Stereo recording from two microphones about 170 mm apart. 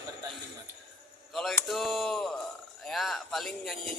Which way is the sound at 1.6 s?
Centre (ahead or behind).